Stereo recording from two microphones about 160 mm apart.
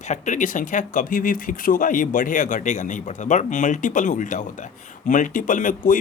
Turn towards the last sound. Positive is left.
turn(degrees=55)  # may be behind; listen again after turning